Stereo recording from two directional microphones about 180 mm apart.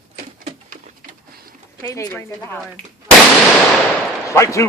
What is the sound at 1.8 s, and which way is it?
Speech, 15° left (ahead or behind).